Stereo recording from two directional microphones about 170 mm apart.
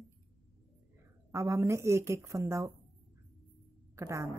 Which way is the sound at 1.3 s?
15° right (ahead or behind).